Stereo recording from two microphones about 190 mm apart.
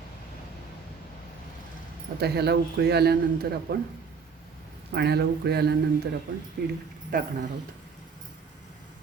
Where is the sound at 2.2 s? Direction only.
60° right (ahead or behind).